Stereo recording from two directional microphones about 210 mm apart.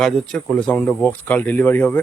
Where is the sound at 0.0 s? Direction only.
Centre (ahead or behind).